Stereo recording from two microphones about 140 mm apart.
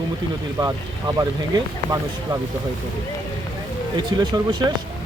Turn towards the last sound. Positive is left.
turn(degrees=-30)  # may be behind; listen again after turning